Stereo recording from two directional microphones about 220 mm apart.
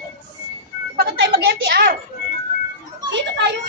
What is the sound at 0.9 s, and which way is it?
A woman's voice, 50° right (ahead or behind).